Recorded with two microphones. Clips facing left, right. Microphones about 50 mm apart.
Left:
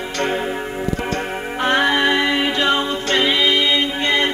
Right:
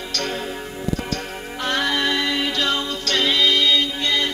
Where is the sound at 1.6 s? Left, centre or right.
Left.